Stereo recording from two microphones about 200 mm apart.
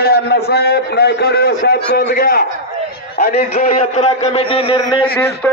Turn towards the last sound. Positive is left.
turn(degrees=25)  # may be behind; listen again after turning